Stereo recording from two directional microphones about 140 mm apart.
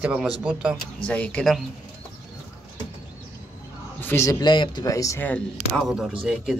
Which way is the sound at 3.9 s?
15° left (ahead or behind).